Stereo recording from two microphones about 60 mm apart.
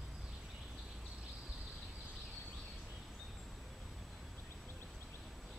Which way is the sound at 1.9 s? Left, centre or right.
Centre.